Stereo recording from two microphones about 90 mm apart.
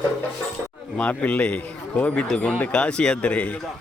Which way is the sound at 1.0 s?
15° left (ahead or behind).